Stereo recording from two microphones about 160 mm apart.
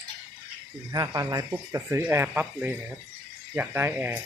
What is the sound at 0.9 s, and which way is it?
Speech, 20° right (ahead or behind).